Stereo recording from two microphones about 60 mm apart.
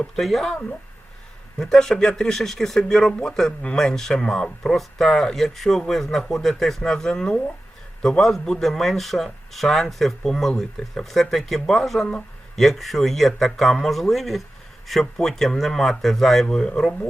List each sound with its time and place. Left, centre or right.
0.2 s speech: centre
1.5 s speech: centre